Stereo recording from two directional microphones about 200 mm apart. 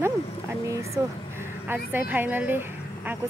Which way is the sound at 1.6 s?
10° right (ahead or behind).